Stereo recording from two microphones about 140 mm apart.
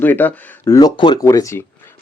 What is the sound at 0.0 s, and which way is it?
Speech, 15° left (ahead or behind).